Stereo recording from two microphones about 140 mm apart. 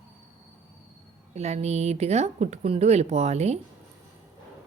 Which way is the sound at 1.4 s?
50° right (ahead or behind).